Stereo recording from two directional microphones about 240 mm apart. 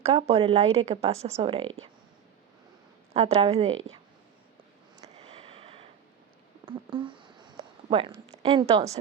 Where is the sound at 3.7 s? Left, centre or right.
Right.